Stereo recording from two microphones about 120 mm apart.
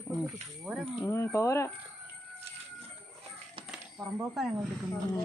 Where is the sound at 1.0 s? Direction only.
25° left (ahead or behind).